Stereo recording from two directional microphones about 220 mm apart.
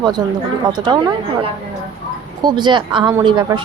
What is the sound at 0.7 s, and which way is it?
Speech, 20° right (ahead or behind).